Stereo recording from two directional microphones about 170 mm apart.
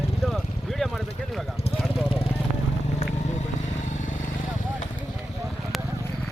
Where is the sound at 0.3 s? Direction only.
Centre (ahead or behind).